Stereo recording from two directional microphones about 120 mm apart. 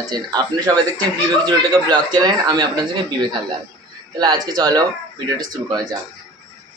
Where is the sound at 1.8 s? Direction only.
35° right (ahead or behind).